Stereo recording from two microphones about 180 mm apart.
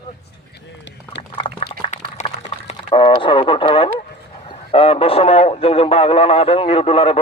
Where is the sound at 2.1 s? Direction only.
35° left (ahead or behind).